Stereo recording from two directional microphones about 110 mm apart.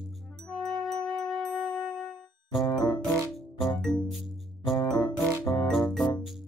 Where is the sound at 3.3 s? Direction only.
Centre (ahead or behind).